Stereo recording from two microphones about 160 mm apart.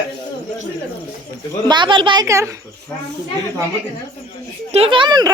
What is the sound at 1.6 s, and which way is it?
Speech, 30° right (ahead or behind).